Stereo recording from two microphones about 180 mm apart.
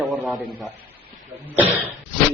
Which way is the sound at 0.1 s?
Centre (ahead or behind).